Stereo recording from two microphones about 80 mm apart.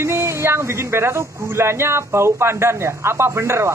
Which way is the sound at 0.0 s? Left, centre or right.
Right.